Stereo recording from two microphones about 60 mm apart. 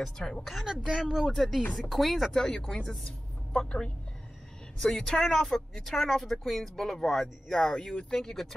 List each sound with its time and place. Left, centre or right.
0.0 s a woman's voice: centre
2.3 s a woman's voice: centre
7.9 s speech: centre
8.2 s speech: centre